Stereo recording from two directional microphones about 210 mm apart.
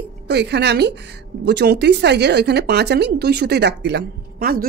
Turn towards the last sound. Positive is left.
turn(degrees=-45)  # may be behind; listen again after turning